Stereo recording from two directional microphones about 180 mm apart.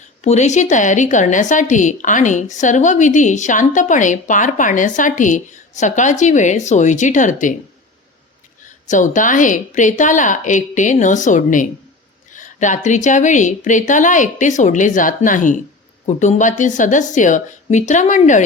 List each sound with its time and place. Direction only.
0.3 s a woman's voice: 40° left (ahead or behind)
8.9 s a woman's voice: 45° left (ahead or behind)